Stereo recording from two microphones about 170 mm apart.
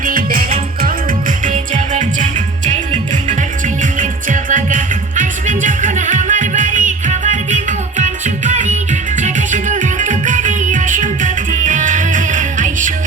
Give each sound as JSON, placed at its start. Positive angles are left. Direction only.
{"t": 0.0, "sound": "music", "side_deg": -55}